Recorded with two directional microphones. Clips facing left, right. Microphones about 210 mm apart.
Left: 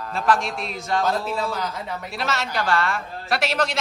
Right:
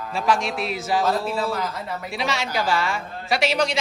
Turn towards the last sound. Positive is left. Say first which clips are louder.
# right 2 dB
turn(degrees=0)  # may be behind; listen again after turning